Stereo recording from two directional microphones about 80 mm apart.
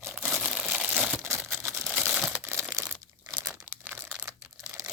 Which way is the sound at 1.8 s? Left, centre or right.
Centre.